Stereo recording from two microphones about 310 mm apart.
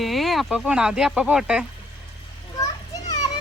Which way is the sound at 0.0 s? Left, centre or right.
Centre.